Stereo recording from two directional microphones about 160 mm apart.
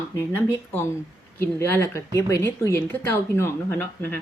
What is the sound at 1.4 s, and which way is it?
Speech, 15° left (ahead or behind).